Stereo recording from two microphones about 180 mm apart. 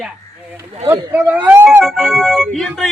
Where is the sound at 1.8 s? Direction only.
Centre (ahead or behind).